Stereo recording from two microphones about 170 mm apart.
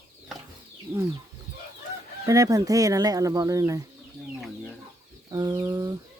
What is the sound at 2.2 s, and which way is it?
Speech, 20° right (ahead or behind).